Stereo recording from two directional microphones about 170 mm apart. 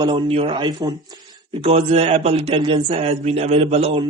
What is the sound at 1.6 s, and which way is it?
A man's voice, 35° right (ahead or behind).